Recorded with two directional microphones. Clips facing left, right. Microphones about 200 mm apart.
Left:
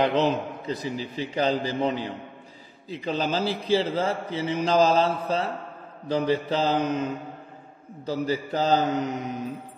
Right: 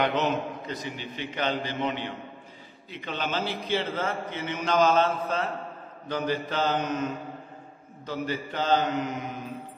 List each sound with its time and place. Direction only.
0.0 s a man's voice: 30° left (ahead or behind)